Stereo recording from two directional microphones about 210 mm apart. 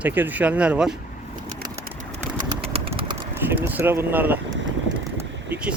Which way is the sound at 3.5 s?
10° right (ahead or behind).